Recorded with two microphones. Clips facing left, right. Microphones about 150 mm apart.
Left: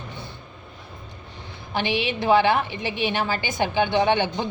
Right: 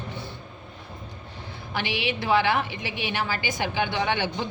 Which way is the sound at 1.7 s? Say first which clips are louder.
Left 4 dB; 25° left (ahead or behind).